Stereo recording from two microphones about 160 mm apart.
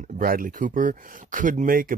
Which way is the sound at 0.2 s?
65° right (ahead or behind).